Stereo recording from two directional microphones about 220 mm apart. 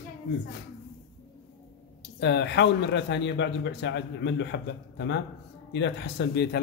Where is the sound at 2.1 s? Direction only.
50° left (ahead or behind).